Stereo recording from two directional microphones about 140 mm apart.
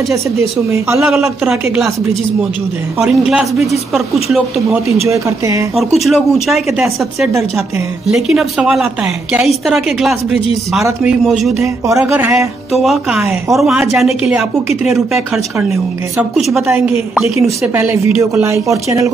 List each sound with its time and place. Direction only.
0.7 s speech: 20° right (ahead or behind)
1.0 s a woman's voice: 5° right (ahead or behind)
3.0 s a woman's voice: 5° right (ahead or behind)
5.0 s speech: 20° right (ahead or behind)
5.8 s a woman's voice: centre (ahead or behind)
10.9 s a woman's voice: 15° right (ahead or behind)
11.2 s a woman's voice: centre (ahead or behind)
11.6 s speech: 20° right (ahead or behind)
12.0 s a woman's voice: 10° right (ahead or behind)
16.3 s a woman's voice: centre (ahead or behind)
17.5 s speech: 20° right (ahead or behind)